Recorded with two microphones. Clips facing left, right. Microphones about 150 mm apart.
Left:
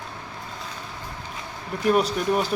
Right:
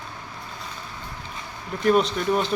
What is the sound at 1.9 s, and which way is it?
Speech, 5° left (ahead or behind).